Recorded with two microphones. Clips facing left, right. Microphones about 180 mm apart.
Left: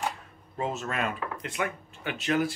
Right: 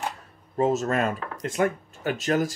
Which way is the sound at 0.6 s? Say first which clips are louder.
Right 8 dB; 40° right (ahead or behind).